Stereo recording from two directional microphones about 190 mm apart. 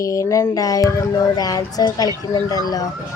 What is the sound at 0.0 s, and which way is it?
Speech, 15° left (ahead or behind).